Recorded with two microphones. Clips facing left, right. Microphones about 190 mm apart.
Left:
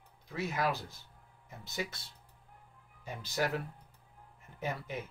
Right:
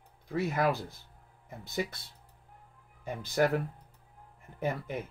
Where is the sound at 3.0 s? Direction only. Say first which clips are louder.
Right 7 dB; 55° right (ahead or behind).